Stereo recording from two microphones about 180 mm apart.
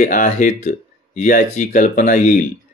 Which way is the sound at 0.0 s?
45° left (ahead or behind).